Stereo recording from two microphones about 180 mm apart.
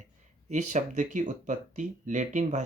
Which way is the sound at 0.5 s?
40° right (ahead or behind).